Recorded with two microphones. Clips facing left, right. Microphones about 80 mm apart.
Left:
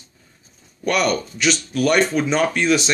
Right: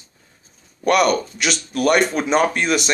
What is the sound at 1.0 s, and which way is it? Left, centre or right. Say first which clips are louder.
Speech: right 1 dB; right.